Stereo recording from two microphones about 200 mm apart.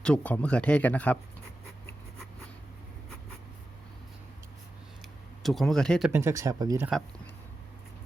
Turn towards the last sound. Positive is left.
turn(degrees=-20)  # may be behind; listen again after turning